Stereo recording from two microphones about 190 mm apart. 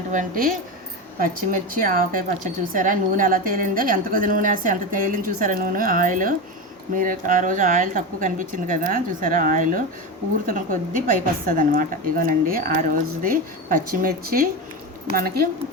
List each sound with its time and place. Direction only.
0.1 s a woman's voice: 45° right (ahead or behind)